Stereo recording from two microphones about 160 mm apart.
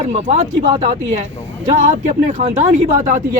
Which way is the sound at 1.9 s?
45° right (ahead or behind).